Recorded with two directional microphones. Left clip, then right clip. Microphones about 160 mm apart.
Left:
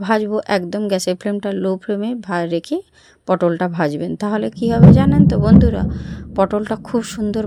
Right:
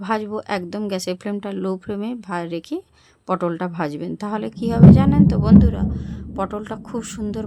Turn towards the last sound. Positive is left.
turn(degrees=30)  # may be behind; listen again after turning